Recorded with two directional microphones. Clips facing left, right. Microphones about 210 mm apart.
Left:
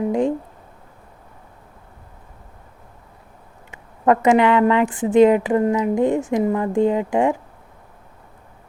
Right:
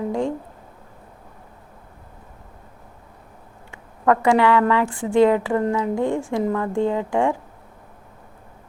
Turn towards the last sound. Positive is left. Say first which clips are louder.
# left 3 dB
turn(degrees=15)  # may be behind; listen again after turning